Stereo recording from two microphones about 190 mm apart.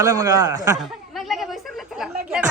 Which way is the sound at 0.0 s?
20° right (ahead or behind).